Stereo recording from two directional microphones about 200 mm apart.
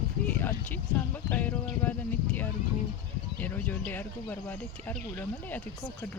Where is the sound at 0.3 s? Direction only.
10° left (ahead or behind).